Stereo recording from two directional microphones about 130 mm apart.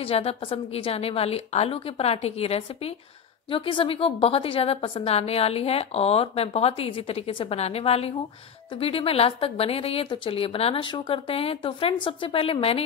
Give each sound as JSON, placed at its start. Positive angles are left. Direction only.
{"t": 0.0, "sound": "a woman's voice", "side_deg": 50}